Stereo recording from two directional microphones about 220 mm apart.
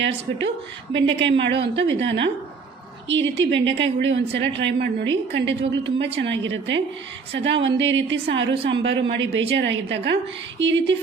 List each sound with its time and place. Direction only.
0.0 s a woman's voice: 55° right (ahead or behind)